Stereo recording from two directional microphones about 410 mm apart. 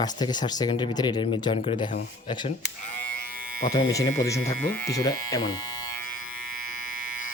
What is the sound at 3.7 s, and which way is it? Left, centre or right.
Speech, centre.